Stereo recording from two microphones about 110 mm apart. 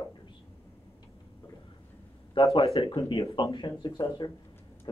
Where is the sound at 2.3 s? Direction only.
60° left (ahead or behind).